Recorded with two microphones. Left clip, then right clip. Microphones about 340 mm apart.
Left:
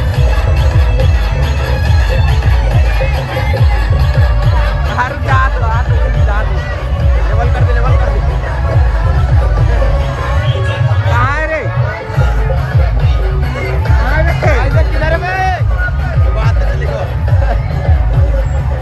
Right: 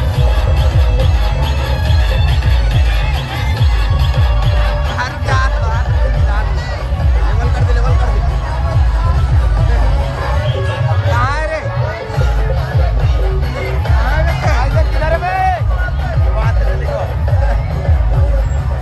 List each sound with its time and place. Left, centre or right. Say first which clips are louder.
4.9 s music: left 6 dB; centre
11.1 s a sound: left 4 dB; centre
14.4 s music: left 3 dB; centre